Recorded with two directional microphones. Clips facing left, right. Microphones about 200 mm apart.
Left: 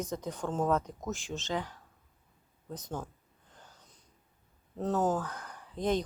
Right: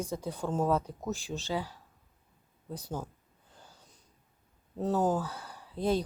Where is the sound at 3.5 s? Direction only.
10° right (ahead or behind).